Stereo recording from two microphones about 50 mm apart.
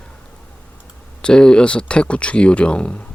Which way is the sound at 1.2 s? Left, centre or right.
Centre.